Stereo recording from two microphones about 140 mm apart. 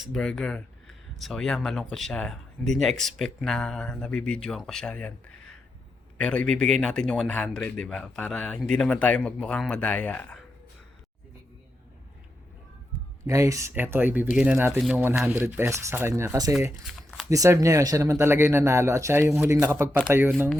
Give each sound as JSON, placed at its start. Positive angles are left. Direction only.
{"t": 0.1, "sound": "speech", "side_deg": 5}
{"t": 6.1, "sound": "speech", "side_deg": 10}
{"t": 13.2, "sound": "speech", "side_deg": -20}
{"t": 15.3, "sound": "speech", "side_deg": -15}
{"t": 16.8, "sound": "shuffling cards", "side_deg": 0}
{"t": 17.2, "sound": "speech", "side_deg": -25}